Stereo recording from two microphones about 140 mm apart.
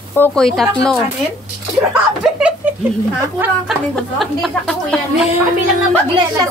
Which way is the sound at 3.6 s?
Centre (ahead or behind).